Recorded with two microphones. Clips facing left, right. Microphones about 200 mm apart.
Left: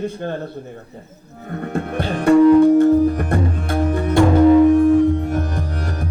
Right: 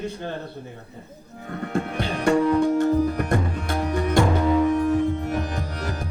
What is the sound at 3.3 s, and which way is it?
Tabla, 50° left (ahead or behind).